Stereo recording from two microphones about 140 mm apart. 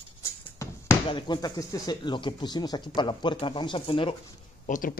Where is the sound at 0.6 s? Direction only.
25° left (ahead or behind).